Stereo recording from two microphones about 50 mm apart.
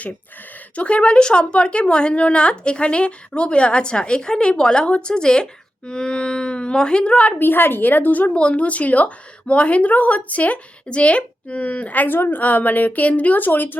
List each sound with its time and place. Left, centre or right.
0.8 s a woman's voice: left
7.3 s a woman's voice: left
8.3 s a woman's voice: left